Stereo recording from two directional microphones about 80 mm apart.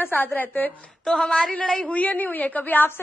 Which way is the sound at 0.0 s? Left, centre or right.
Left.